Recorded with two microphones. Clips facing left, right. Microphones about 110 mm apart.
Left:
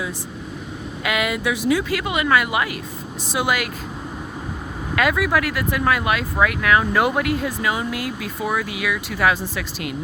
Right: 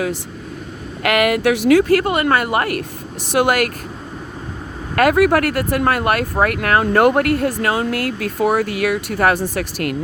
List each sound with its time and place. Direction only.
1.0 s speech: 60° right (ahead or behind)
1.8 s speech: 50° right (ahead or behind)
4.9 s speech: 50° right (ahead or behind)